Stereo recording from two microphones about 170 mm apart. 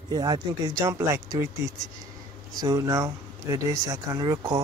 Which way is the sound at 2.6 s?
20° right (ahead or behind).